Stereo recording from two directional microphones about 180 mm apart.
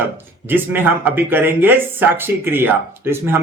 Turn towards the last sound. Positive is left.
turn(degrees=-10)  # may be behind; listen again after turning